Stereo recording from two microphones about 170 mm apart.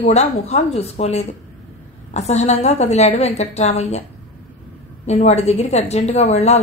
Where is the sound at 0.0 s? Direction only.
40° left (ahead or behind).